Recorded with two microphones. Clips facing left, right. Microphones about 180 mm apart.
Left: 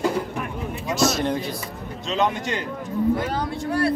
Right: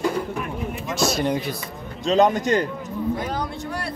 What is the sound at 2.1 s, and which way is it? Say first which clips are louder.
Speech: right 6 dB; 40° right (ahead or behind).